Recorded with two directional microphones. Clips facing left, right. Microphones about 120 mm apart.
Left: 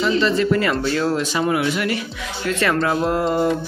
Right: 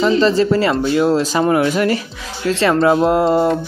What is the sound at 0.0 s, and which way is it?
Mantra, 35° right (ahead or behind).